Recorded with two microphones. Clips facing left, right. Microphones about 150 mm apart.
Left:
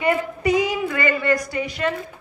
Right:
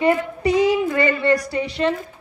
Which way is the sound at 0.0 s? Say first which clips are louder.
Right 2 dB; 30° right (ahead or behind).